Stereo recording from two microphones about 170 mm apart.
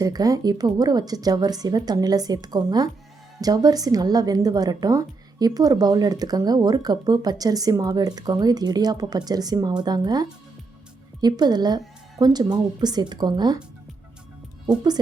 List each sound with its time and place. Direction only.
0.0 s a woman's voice: 20° right (ahead or behind)